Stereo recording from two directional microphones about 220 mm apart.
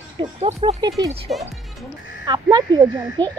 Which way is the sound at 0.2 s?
30° right (ahead or behind).